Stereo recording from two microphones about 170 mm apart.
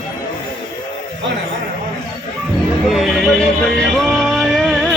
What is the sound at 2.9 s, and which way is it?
Speech, centre (ahead or behind).